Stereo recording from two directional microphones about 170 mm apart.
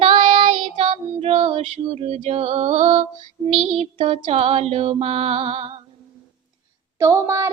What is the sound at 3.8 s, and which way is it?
Female singing, 35° right (ahead or behind).